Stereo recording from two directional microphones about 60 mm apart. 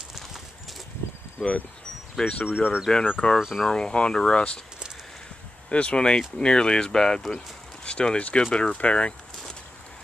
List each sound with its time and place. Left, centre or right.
1.4 s speech: centre
3.3 s speech: centre
3.6 s speech: centre
5.7 s speech: centre